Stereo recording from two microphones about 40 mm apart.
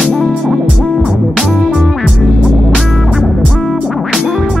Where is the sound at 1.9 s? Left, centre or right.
Centre.